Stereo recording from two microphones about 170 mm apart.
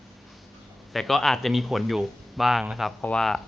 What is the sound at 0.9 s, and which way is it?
Speech, centre (ahead or behind).